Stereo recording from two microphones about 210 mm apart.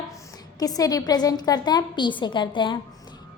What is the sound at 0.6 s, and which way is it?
A woman's voice, 15° left (ahead or behind).